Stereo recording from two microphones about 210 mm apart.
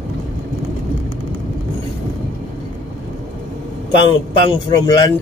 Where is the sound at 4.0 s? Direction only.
20° left (ahead or behind).